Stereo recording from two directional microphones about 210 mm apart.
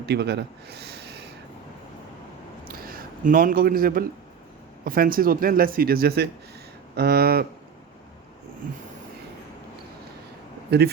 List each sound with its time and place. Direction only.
0.0 s speech: 50° right (ahead or behind)
2.6 s a sound: 45° right (ahead or behind)
4.9 s speech: 45° right (ahead or behind)
10.7 s speech: 50° right (ahead or behind)